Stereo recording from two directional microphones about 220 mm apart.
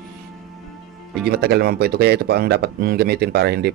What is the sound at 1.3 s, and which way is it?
Speech, 45° right (ahead or behind).